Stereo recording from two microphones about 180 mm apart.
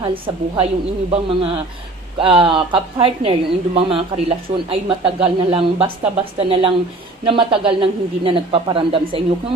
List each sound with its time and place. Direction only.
0.0 s speech: 30° right (ahead or behind)